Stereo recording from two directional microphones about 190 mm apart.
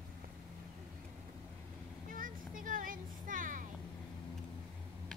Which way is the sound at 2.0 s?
45° right (ahead or behind).